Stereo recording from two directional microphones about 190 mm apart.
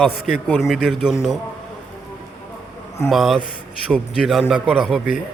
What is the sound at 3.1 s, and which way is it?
A man's voice, centre (ahead or behind).